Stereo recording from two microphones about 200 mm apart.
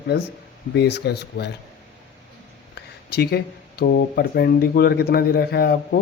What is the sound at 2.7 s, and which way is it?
Speech, 55° left (ahead or behind).